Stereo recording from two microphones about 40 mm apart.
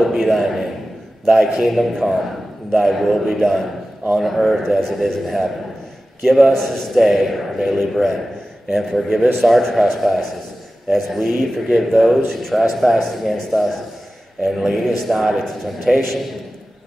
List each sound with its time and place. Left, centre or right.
0.0 s a man's voice: centre
6.5 s a man's voice: centre